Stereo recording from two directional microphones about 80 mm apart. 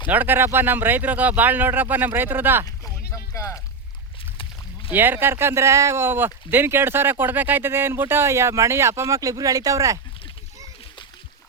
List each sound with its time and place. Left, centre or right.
0.1 s speech: right
2.6 s a sound: left
4.9 s speech: right